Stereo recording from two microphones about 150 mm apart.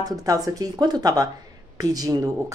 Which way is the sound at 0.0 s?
25° right (ahead or behind).